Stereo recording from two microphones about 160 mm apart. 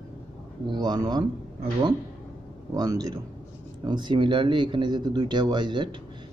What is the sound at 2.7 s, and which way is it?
Speech, 25° right (ahead or behind).